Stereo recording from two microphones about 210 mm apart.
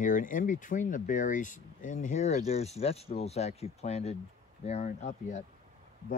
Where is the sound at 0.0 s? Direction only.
40° left (ahead or behind).